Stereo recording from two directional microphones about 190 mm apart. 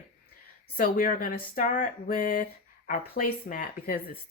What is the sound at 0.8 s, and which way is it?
A woman's voice, 50° left (ahead or behind).